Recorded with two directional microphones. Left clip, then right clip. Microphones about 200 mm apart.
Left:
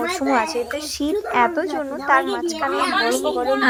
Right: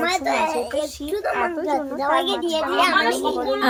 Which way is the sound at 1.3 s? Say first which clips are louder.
Left 6 dB; 40° left (ahead or behind).